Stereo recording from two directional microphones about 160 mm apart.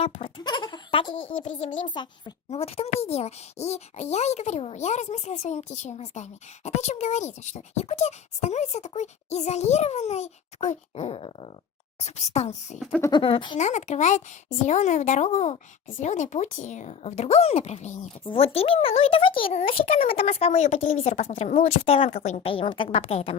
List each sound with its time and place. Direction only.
0.0 s speech: 35° left (ahead or behind)
13.0 s speech: 25° left (ahead or behind)
13.6 s speech: 45° left (ahead or behind)